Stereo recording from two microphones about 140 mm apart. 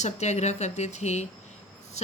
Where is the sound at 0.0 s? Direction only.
55° left (ahead or behind).